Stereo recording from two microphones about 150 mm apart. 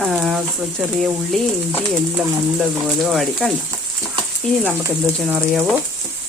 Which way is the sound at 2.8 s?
Centre (ahead or behind).